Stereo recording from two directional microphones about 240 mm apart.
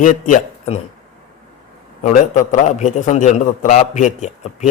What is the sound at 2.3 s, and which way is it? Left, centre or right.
A man's voice, left.